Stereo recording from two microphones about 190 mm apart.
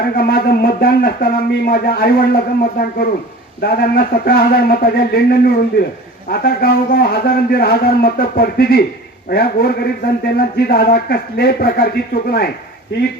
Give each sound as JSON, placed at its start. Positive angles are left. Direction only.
{"t": 0.0, "sound": "speech", "side_deg": 50}